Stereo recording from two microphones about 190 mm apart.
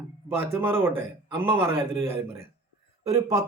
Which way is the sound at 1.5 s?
10° right (ahead or behind).